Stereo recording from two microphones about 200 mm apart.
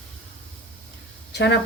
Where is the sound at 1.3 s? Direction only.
60° left (ahead or behind).